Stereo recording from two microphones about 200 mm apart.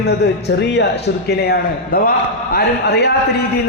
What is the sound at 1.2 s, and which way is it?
A man's voice, 55° left (ahead or behind).